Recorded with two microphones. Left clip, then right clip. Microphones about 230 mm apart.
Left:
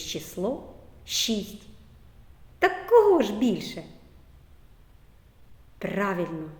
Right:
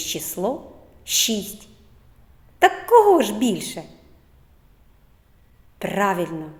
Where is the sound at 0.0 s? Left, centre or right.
Centre.